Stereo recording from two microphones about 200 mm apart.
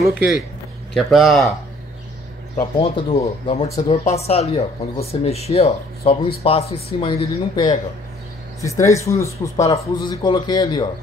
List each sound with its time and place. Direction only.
0.9 s speech: centre (ahead or behind)
2.6 s speech: 25° left (ahead or behind)
3.6 s speech: 15° left (ahead or behind)
4.0 s speech: 30° left (ahead or behind)